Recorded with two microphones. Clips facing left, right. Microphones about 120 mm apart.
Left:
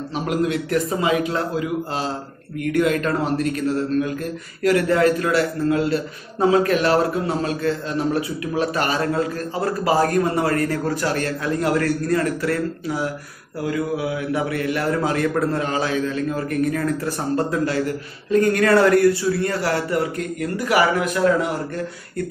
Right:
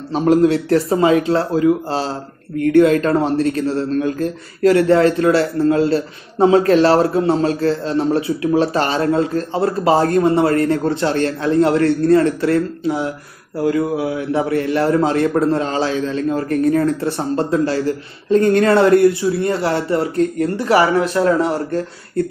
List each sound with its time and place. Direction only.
0.1 s speech: 30° right (ahead or behind)